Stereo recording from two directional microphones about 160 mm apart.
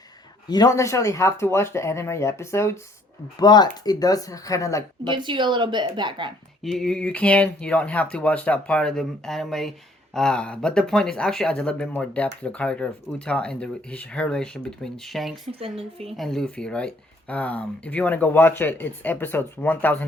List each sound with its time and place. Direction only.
0.4 s speech: 25° left (ahead or behind)
5.0 s a woman's voice: 30° right (ahead or behind)
6.6 s speech: centre (ahead or behind)